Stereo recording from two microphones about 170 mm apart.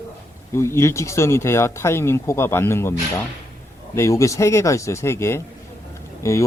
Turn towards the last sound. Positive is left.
turn(degrees=15)  # may be behind; listen again after turning